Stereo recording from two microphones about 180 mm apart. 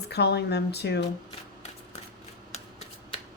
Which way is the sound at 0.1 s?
65° left (ahead or behind).